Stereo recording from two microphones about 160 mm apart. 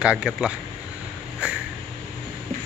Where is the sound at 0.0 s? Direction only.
5° right (ahead or behind).